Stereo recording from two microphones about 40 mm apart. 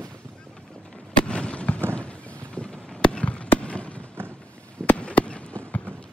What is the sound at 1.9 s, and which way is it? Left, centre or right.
Clip-clop, left.